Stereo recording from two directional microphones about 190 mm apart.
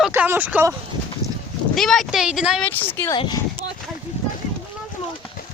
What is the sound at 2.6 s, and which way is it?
Speech, 10° left (ahead or behind).